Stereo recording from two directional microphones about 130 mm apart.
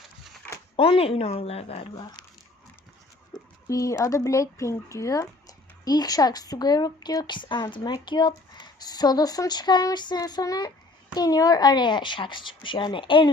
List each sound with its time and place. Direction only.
0.8 s a woman's voice: 45° left (ahead or behind)
2.0 s speech: 30° left (ahead or behind)
3.7 s speech: 25° left (ahead or behind)